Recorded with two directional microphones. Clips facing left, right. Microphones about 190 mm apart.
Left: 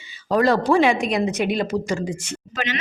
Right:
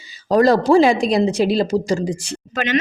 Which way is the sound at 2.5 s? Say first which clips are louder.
Right 8 dB; 55° right (ahead or behind).